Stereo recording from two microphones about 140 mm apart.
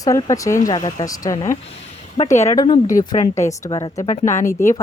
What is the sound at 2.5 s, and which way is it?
Speech, 35° left (ahead or behind).